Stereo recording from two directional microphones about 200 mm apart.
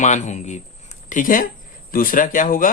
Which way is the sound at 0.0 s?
35° left (ahead or behind).